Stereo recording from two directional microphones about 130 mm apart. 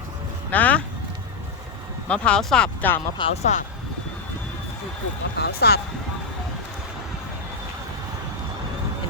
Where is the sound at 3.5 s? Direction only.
60° left (ahead or behind).